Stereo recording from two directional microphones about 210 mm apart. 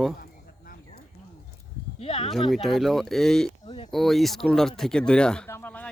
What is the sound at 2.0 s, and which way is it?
Speech, 25° left (ahead or behind).